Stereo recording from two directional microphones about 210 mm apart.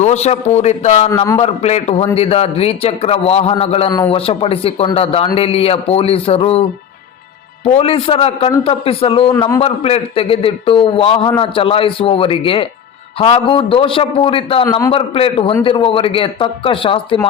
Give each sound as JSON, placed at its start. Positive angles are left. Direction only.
{"t": 0.0, "sound": "a man's voice", "side_deg": 30}
{"t": 1.1, "sound": "a man's voice", "side_deg": 15}
{"t": 1.4, "sound": "a man's voice", "side_deg": 30}
{"t": 9.3, "sound": "a man's voice", "side_deg": 15}
{"t": 9.6, "sound": "a man's voice", "side_deg": 30}